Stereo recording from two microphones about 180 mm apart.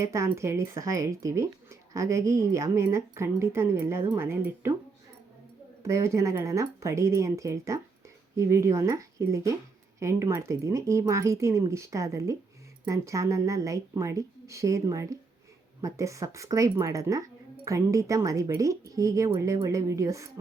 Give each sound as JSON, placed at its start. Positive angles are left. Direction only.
{"t": 0.0, "sound": "speech", "side_deg": -15}
{"t": 5.8, "sound": "speech", "side_deg": -15}